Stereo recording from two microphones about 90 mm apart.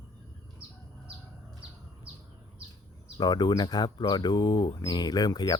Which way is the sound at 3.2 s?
50° left (ahead or behind).